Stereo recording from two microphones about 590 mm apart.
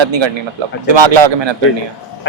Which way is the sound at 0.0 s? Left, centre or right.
Right.